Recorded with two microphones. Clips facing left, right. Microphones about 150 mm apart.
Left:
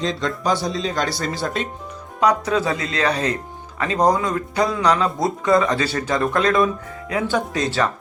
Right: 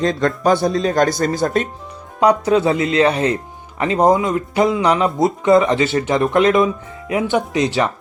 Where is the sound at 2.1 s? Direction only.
30° right (ahead or behind).